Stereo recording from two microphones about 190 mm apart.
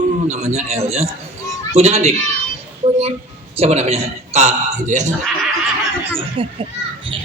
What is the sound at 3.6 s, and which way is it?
Speech, 35° right (ahead or behind).